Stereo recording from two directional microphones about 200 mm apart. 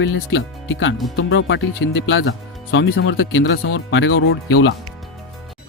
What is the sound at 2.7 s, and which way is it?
Speech, 60° left (ahead or behind).